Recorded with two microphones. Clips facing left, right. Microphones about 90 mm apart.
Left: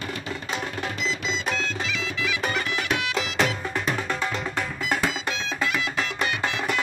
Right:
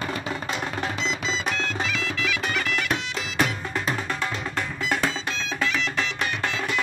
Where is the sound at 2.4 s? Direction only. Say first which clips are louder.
Left 1 dB; 35° left (ahead or behind).